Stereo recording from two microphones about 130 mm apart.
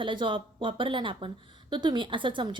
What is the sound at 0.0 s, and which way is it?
A woman's voice, 40° right (ahead or behind).